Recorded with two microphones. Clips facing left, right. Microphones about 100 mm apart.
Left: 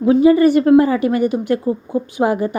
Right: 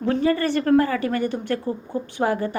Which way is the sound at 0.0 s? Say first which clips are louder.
Left 10 dB; 10° left (ahead or behind).